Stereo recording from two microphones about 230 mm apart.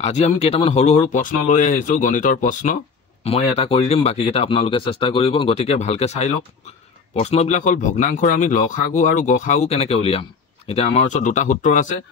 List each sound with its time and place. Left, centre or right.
0.0 s speech: left